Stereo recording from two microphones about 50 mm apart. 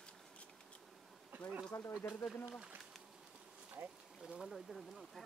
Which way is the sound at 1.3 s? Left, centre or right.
Right.